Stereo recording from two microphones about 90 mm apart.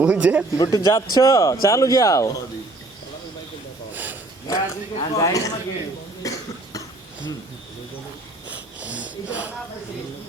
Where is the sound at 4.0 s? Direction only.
20° right (ahead or behind).